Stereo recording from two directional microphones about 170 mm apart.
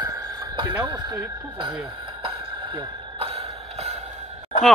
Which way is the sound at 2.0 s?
30° right (ahead or behind).